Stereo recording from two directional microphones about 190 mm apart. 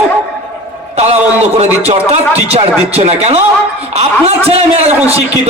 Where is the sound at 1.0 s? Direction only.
35° right (ahead or behind).